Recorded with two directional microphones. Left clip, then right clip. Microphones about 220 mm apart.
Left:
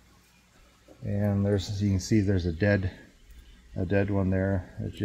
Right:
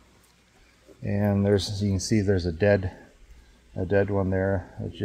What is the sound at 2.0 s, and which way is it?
Speech, 10° right (ahead or behind).